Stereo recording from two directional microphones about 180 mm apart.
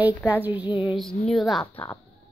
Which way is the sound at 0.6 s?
25° left (ahead or behind).